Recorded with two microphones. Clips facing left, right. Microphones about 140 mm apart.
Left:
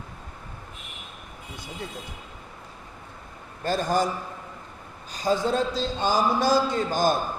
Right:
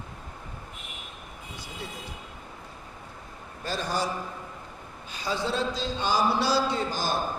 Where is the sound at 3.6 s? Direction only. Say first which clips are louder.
Left 6 dB; 50° left (ahead or behind).